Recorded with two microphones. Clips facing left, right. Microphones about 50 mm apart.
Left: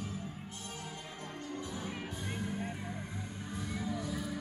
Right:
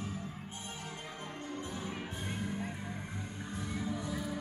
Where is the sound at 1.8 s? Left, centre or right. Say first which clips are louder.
Even; centre.